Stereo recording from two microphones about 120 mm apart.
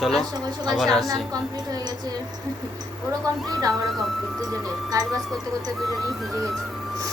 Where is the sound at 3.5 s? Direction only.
30° right (ahead or behind).